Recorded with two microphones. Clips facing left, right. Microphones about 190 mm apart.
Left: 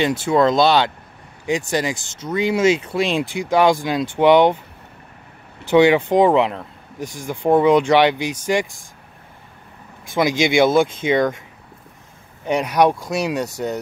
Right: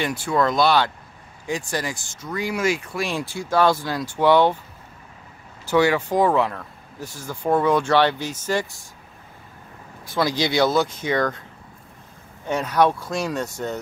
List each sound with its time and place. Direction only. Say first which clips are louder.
0.0 s speech: left 5 dB; 25° left (ahead or behind)
5.7 s speech: left 6 dB; 20° left (ahead or behind)
10.1 s speech: left 4 dB; 20° left (ahead or behind)
12.4 s speech: left 3 dB; 15° left (ahead or behind)